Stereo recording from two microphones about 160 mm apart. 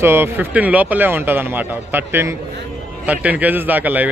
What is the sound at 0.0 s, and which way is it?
A man's voice, 15° right (ahead or behind).